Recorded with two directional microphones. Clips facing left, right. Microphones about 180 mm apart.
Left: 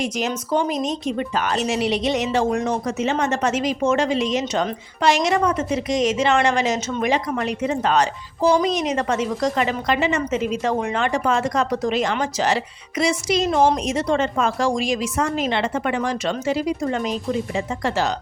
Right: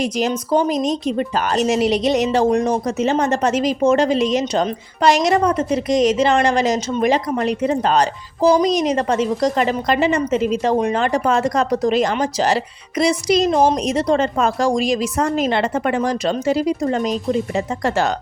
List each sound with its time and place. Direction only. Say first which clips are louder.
0.0 s speech: right 4 dB; 35° right (ahead or behind)
13.5 s a woman's voice: left 1 dB; 20° right (ahead or behind)
13.8 s speech: right 3 dB; 35° right (ahead or behind)